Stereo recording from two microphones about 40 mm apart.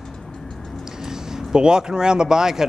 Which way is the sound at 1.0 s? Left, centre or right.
Centre.